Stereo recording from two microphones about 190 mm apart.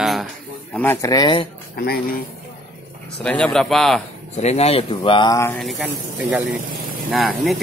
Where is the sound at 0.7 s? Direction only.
15° left (ahead or behind).